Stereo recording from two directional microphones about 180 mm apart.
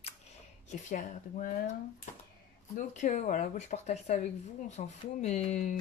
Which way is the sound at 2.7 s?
40° left (ahead or behind).